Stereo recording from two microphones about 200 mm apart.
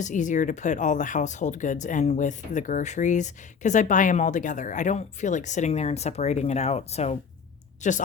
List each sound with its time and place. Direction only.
0.0 s speech: 40° left (ahead or behind)